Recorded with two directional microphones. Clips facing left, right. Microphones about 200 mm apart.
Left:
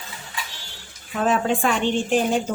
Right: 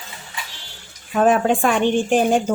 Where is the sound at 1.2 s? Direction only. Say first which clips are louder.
Right 5 dB; 50° right (ahead or behind).